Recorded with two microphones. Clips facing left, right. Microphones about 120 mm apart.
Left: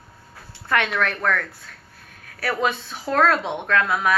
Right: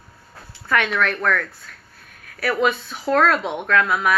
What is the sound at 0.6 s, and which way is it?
Speech, 25° left (ahead or behind).